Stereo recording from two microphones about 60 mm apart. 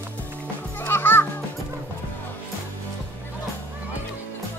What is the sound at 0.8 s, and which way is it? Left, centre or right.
Children playing, left.